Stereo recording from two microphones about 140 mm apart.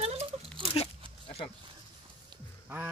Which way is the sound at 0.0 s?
45° right (ahead or behind).